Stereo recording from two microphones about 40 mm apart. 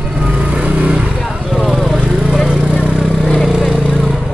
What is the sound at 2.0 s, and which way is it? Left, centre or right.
Vehicle, right.